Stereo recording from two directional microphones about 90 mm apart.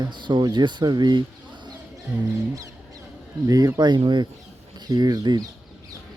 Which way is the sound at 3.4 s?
40° right (ahead or behind).